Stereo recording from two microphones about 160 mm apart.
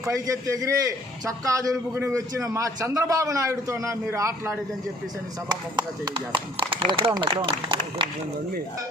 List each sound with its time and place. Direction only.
0.0 s a man's voice: 20° right (ahead or behind)